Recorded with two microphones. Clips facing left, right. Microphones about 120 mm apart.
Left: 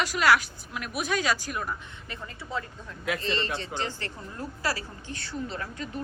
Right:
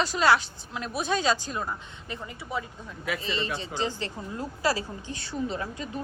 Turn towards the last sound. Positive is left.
turn(degrees=-20)  # may be behind; listen again after turning